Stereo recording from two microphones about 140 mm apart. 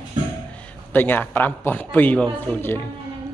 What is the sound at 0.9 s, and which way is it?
A man's voice, 15° left (ahead or behind).